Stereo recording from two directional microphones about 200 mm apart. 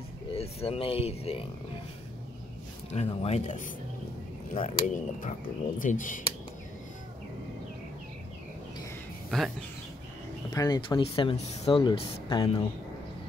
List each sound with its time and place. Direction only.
0.3 s speech: 30° left (ahead or behind)
2.9 s speech: 30° left (ahead or behind)
4.8 s speech: 40° left (ahead or behind)
9.3 s speech: 5° left (ahead or behind)
10.5 s speech: 20° left (ahead or behind)